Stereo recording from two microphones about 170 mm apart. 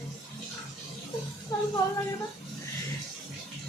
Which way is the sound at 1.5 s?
20° left (ahead or behind).